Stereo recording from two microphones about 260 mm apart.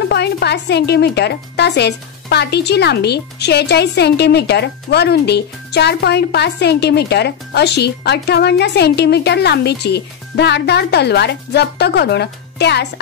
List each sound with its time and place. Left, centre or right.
0.1 s speech: left